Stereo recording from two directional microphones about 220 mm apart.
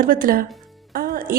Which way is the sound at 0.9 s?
40° right (ahead or behind).